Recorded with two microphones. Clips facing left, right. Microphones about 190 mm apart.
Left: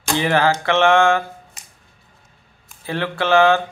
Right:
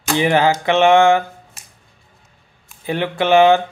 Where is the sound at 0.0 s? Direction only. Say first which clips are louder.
Right 2 dB; 15° right (ahead or behind).